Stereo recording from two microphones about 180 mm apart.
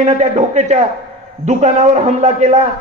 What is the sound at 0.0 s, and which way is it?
A man's voice, 40° right (ahead or behind).